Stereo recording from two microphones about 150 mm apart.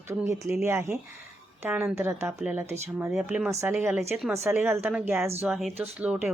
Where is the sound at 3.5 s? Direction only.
20° right (ahead or behind).